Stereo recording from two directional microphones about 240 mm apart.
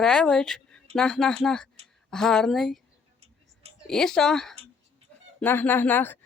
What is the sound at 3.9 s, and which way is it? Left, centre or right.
Speech, centre.